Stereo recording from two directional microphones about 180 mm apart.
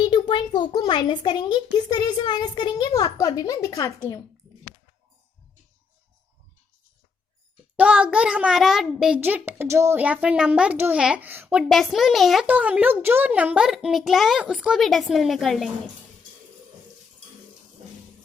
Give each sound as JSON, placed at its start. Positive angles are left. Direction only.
{"t": 0.0, "sound": "a child's voice", "side_deg": 25}
{"t": 7.8, "sound": "a child's voice", "side_deg": -5}